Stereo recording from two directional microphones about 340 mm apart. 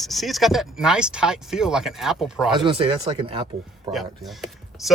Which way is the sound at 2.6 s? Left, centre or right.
Centre.